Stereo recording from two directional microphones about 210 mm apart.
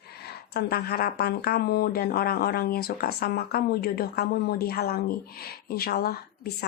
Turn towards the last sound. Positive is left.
turn(degrees=45)  # may be behind; listen again after turning